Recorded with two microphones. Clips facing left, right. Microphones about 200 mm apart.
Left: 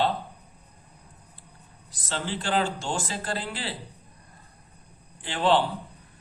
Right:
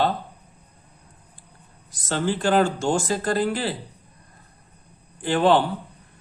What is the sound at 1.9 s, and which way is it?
A man's voice, 45° right (ahead or behind).